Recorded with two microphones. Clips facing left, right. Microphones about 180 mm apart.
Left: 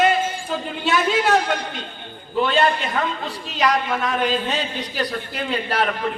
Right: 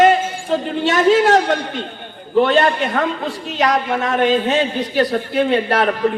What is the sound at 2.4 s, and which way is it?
A man's voice, 50° right (ahead or behind).